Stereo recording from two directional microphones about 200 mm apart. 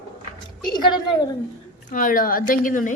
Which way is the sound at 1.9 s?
45° left (ahead or behind).